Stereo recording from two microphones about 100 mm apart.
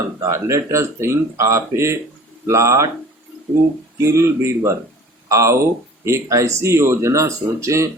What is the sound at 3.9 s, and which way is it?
Speech, 30° right (ahead or behind).